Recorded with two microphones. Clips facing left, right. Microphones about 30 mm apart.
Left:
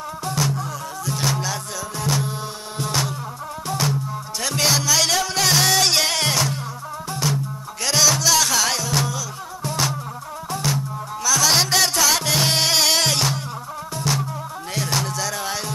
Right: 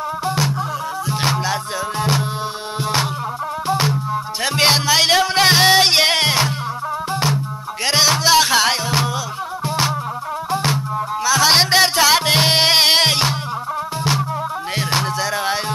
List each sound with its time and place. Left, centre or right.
1.0 s music: right
7.8 s music: right
10.5 s music: right
14.8 s music: right